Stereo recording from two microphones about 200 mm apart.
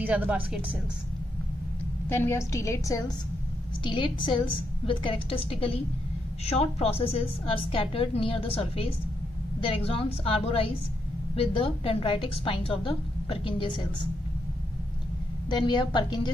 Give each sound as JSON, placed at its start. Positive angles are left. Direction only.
{"t": 0.0, "sound": "speech", "side_deg": -5}
{"t": 2.0, "sound": "a woman's voice", "side_deg": 10}
{"t": 15.5, "sound": "a woman's voice", "side_deg": 25}